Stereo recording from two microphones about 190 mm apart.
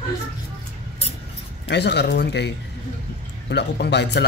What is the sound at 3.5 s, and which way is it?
Speech, 65° left (ahead or behind).